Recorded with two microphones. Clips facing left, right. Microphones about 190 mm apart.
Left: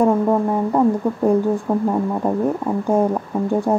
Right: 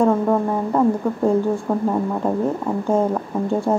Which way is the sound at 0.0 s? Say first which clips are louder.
Left 1 dB; 15° left (ahead or behind).